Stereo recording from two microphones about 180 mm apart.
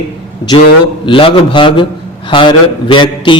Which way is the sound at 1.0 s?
30° left (ahead or behind).